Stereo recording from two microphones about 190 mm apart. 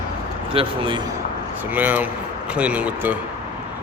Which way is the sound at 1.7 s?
10° right (ahead or behind).